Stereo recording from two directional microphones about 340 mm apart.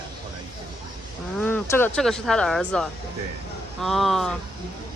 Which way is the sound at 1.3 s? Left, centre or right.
Centre.